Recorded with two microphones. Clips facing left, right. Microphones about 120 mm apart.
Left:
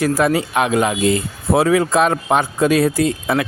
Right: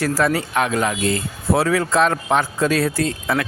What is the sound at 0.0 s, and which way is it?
Speech, 15° left (ahead or behind).